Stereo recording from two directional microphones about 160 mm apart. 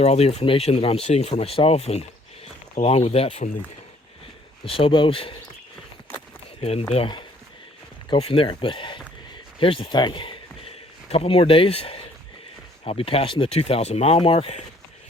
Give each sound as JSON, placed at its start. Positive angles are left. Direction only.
{"t": 0.0, "sound": "speech", "side_deg": 40}
{"t": 4.6, "sound": "speech", "side_deg": 35}
{"t": 6.6, "sound": "a man's voice", "side_deg": 40}